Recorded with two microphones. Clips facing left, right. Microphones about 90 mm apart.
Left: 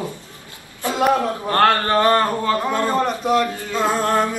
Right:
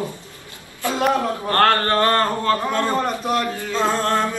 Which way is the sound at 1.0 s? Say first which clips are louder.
Left 2 dB; 15° left (ahead or behind).